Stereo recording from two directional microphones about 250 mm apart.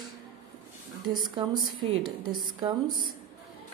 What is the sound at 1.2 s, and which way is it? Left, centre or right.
A woman's voice, centre.